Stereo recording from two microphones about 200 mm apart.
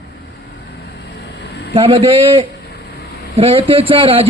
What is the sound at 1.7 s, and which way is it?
A man's voice, 25° right (ahead or behind).